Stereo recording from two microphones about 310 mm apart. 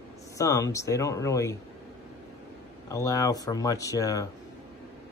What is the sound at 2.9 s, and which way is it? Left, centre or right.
Speech, centre.